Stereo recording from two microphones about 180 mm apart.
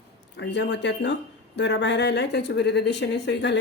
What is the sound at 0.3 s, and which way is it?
Speech, 75° left (ahead or behind).